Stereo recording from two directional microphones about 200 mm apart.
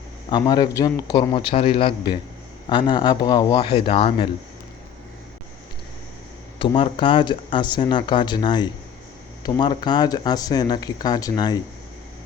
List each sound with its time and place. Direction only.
0.3 s speech: 20° left (ahead or behind)
6.6 s speech: 25° left (ahead or behind)